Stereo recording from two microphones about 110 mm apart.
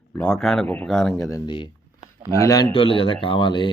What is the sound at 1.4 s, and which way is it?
Speech, 50° left (ahead or behind).